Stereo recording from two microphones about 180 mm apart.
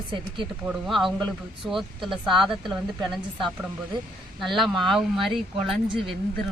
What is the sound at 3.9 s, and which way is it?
Speech, 25° right (ahead or behind).